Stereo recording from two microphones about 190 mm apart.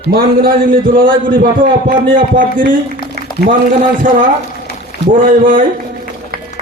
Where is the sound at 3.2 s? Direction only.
55° right (ahead or behind).